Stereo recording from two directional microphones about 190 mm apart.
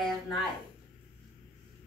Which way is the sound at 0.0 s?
Centre (ahead or behind).